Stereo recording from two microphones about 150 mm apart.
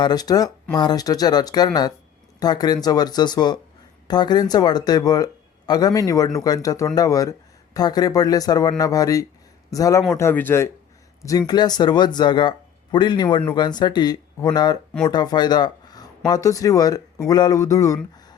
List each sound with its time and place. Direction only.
0.0 s a man's voice: 25° left (ahead or behind)